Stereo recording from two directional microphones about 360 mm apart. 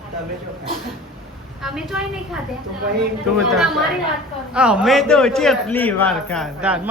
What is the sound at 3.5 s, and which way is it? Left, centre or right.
Speech, centre.